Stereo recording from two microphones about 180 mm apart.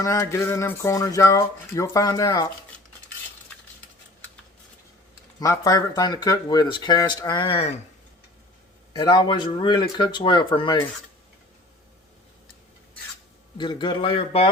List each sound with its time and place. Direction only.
0.0 s speech: 15° left (ahead or behind)
5.4 s speech: 20° left (ahead or behind); by 7.8 s 35° left (ahead or behind)
8.9 s speech: 25° left (ahead or behind)
13.6 s speech: 25° left (ahead or behind)